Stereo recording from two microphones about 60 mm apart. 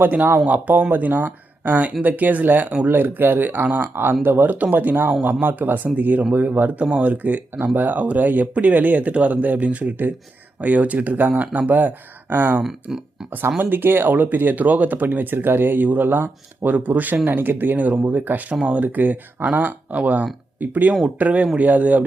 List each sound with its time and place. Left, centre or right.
0.0 s speech: right
12.9 s speech: centre
13.6 s speech: right